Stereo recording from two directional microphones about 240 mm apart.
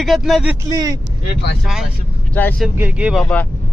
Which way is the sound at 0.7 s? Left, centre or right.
Centre.